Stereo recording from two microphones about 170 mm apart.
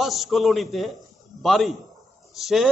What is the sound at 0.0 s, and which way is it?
A man's voice, centre (ahead or behind).